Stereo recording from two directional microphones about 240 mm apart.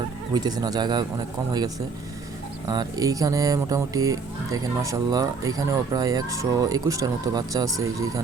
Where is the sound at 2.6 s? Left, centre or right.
Centre.